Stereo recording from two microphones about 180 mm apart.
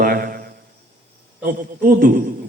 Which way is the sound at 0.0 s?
50° right (ahead or behind).